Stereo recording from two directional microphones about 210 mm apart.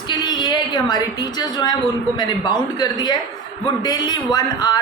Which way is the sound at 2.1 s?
20° left (ahead or behind).